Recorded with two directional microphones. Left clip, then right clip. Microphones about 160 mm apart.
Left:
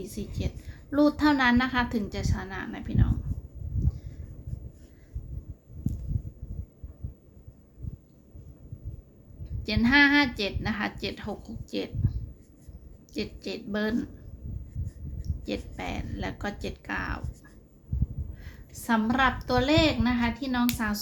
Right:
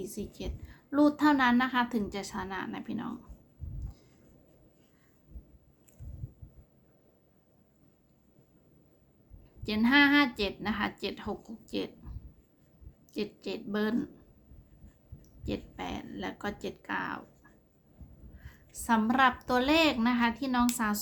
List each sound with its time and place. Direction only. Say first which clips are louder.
0.0 s a woman's voice: left 2 dB; 20° right (ahead or behind)
9.6 s a woman's voice: left 3 dB; 15° right (ahead or behind)
13.1 s a woman's voice: left 2 dB; 15° right (ahead or behind)
15.4 s a woman's voice: left 3 dB; 15° right (ahead or behind)
18.4 s a woman's voice: even; 15° right (ahead or behind)